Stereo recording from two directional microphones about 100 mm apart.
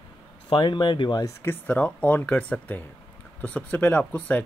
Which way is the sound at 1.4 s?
20° left (ahead or behind).